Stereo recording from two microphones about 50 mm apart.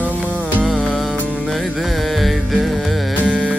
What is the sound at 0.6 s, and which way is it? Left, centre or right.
Music, centre.